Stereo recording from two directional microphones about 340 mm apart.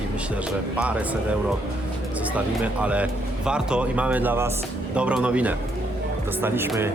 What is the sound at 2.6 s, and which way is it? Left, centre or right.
Speech, centre.